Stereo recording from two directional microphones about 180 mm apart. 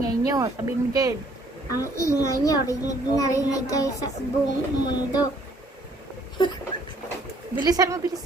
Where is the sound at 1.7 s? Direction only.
15° left (ahead or behind).